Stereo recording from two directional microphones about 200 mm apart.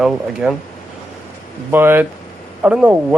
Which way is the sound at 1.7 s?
10° right (ahead or behind).